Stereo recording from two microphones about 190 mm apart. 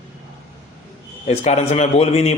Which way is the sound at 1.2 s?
35° left (ahead or behind).